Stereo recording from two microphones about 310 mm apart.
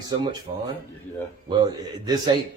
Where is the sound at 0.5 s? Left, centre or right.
Right.